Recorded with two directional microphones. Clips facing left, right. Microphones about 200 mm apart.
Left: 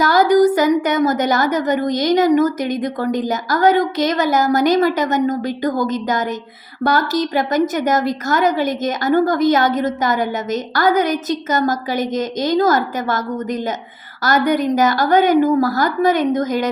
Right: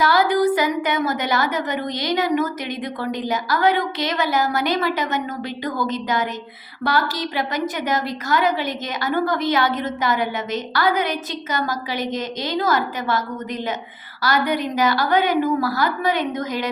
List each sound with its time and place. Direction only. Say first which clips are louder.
0.0 s a woman's voice: left 5 dB; 45° left (ahead or behind)